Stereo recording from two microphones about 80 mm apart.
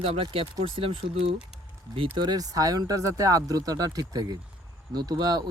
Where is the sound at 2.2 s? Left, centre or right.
Right.